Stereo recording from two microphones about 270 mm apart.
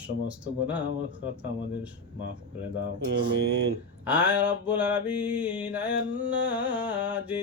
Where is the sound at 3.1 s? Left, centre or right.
Right.